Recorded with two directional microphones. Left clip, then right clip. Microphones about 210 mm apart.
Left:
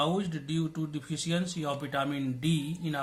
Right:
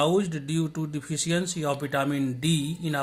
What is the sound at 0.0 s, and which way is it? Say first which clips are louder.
Speech: right 6 dB; 50° right (ahead or behind).